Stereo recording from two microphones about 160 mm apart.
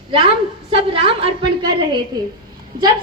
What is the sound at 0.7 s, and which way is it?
A woman's voice, 35° right (ahead or behind).